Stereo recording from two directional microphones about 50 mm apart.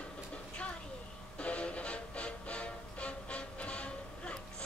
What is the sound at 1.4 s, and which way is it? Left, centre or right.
Music, left.